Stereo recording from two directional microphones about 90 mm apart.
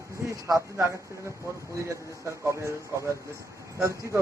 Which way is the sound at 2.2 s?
30° right (ahead or behind).